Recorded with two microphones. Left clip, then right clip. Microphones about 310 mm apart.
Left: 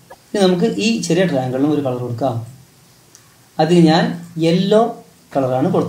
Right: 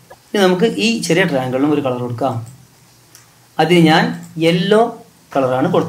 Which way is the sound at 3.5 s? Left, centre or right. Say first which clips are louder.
Right 2 dB; right.